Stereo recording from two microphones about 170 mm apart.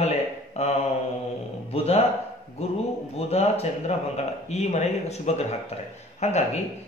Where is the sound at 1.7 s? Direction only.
35° left (ahead or behind).